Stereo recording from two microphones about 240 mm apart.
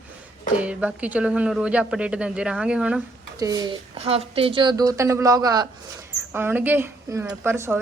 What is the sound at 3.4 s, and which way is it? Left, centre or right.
A woman's voice, centre.